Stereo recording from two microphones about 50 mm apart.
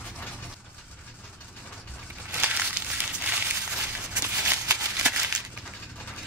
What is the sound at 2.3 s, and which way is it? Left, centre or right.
Crumpling, right.